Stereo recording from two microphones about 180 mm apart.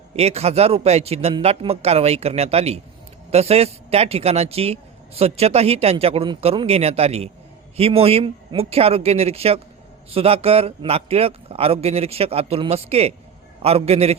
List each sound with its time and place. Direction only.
0.1 s speech: 35° right (ahead or behind)